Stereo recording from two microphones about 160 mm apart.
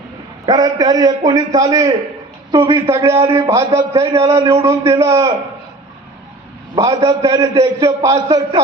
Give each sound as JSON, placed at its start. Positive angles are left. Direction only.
{"t": 0.4, "sound": "a man's voice", "side_deg": -25}
{"t": 6.7, "sound": "a man's voice", "side_deg": -25}